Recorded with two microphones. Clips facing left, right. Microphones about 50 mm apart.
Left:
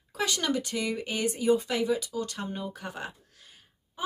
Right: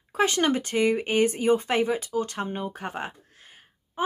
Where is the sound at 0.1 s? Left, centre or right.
Right.